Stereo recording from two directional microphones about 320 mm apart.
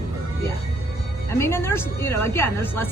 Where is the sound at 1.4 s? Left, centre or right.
Centre.